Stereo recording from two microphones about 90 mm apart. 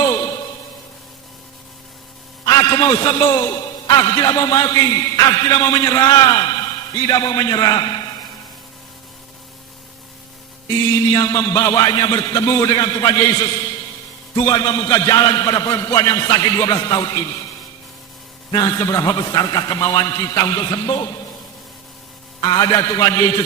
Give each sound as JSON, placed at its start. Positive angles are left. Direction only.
{"t": 0.0, "sound": "a sound", "side_deg": 40}
{"t": 2.5, "sound": "a man's voice", "side_deg": 40}
{"t": 10.9, "sound": "a man's voice", "side_deg": 40}
{"t": 18.5, "sound": "a man's voice", "side_deg": 45}
{"t": 22.4, "sound": "a man's voice", "side_deg": 50}